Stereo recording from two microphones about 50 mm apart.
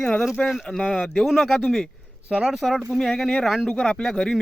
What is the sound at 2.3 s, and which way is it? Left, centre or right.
Speech, centre.